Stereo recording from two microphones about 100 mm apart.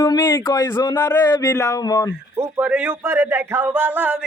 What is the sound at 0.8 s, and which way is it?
Speech, 40° left (ahead or behind).